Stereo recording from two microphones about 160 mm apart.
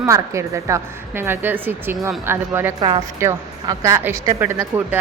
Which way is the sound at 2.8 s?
25° right (ahead or behind).